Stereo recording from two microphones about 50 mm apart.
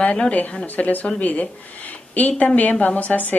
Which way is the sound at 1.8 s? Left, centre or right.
Left.